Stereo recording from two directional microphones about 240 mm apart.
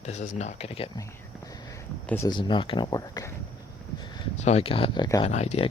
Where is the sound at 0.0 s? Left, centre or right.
Left.